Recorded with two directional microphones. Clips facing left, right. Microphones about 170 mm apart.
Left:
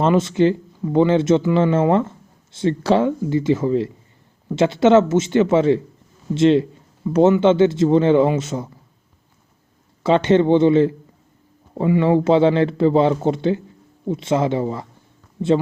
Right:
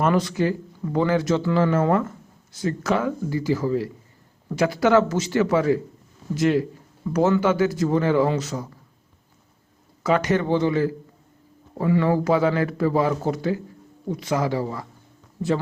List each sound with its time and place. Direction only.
0.0 s speech: 25° left (ahead or behind)
10.0 s speech: 25° left (ahead or behind)